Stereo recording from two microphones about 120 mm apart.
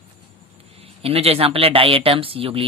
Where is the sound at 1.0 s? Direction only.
55° right (ahead or behind).